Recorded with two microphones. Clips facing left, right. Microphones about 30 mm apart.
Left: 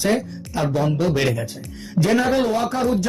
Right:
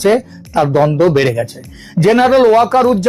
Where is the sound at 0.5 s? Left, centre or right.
Right.